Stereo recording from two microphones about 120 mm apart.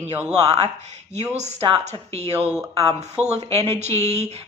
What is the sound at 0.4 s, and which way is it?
Speech, 60° right (ahead or behind).